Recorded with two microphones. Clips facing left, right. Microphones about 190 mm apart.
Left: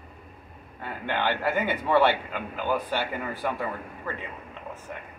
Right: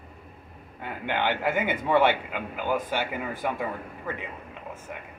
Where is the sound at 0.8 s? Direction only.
15° right (ahead or behind).